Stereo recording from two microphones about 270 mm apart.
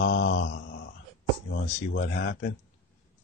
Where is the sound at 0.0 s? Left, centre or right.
Left.